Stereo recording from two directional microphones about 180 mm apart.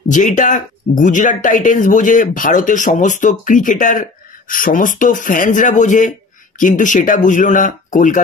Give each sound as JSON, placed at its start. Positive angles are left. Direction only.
{"t": 0.1, "sound": "speech", "side_deg": 45}